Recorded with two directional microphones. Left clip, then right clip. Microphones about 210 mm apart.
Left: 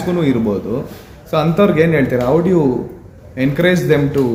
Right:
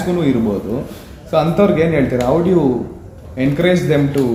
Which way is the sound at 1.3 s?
30° left (ahead or behind).